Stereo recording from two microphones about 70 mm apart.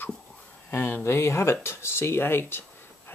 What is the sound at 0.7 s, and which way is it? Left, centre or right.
Speech, left.